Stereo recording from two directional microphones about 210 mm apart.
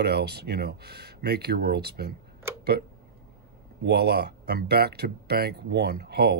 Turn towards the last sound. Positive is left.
turn(degrees=-50)  # may be behind; listen again after turning